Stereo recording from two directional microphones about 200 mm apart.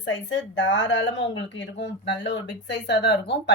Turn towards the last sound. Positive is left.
turn(degrees=60)  # may be behind; listen again after turning